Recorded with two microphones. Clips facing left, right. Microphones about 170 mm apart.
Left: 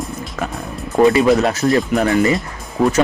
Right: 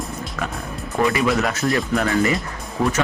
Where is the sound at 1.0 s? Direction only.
25° left (ahead or behind).